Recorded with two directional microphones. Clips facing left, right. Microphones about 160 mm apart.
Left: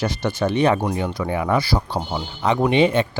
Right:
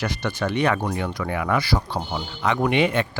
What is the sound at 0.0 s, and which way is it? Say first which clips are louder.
Speech: left 4 dB; 25° left (ahead or behind).